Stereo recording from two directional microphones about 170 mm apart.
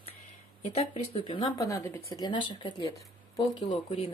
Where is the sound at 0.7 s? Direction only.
35° left (ahead or behind).